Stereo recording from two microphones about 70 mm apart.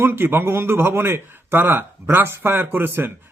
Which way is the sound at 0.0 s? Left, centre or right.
Right.